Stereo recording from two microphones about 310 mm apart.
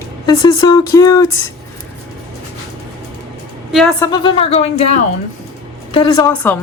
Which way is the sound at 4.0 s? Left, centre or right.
Centre.